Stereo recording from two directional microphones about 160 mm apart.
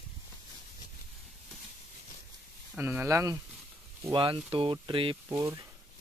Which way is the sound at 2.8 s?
15° right (ahead or behind).